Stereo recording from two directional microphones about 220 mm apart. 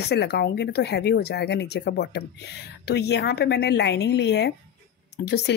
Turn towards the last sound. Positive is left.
turn(degrees=50)  # may be behind; listen again after turning